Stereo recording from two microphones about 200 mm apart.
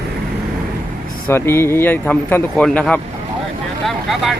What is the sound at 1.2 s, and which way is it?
Speech, 10° left (ahead or behind).